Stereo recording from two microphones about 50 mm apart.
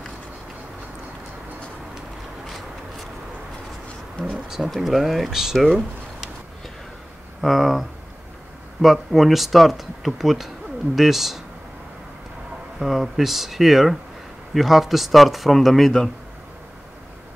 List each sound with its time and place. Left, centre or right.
4.2 s speech: centre
4.6 s speech: centre
7.4 s speech: centre
8.8 s speech: centre
12.7 s speech: centre